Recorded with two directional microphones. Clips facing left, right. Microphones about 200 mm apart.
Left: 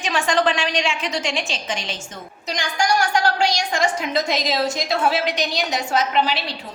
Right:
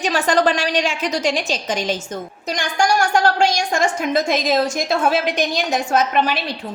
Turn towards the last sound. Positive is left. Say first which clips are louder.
# right 2 dB
turn(degrees=-50)  # may be behind; listen again after turning